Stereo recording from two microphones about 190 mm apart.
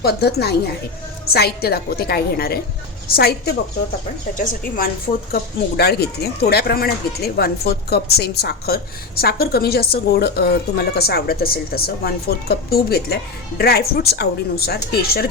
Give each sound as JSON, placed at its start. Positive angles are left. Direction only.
{"t": 0.0, "sound": "speech", "side_deg": 55}
{"t": 5.3, "sound": "speech", "side_deg": 55}